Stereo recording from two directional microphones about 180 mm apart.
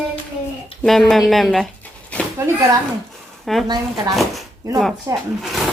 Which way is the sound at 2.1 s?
5° left (ahead or behind).